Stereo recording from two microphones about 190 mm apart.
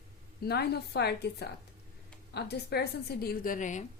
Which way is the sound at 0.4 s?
55° left (ahead or behind).